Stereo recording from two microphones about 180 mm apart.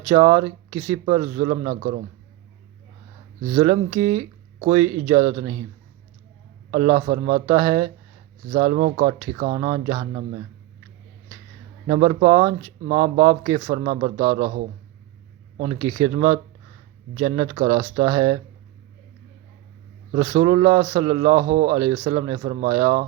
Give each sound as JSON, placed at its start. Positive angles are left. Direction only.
{"t": 0.0, "sound": "speech", "side_deg": -25}
{"t": 1.7, "sound": "a man's voice", "side_deg": -50}
{"t": 3.5, "sound": "speech", "side_deg": -25}
{"t": 6.7, "sound": "speech", "side_deg": -30}
{"t": 11.9, "sound": "speech", "side_deg": -35}
{"t": 15.7, "sound": "speech", "side_deg": -25}
{"t": 20.1, "sound": "speech", "side_deg": -30}